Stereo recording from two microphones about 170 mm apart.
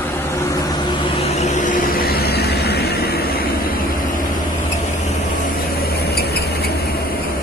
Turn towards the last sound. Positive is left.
turn(degrees=70)  # may be behind; listen again after turning